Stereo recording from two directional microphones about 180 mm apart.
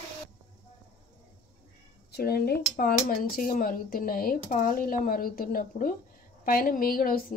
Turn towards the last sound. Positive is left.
turn(degrees=55)  # may be behind; listen again after turning